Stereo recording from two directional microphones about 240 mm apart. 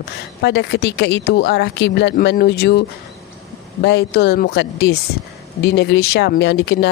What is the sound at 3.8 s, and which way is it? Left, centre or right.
Speech, left.